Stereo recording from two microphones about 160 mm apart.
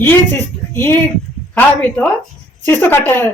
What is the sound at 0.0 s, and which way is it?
A woman's voice, 10° left (ahead or behind).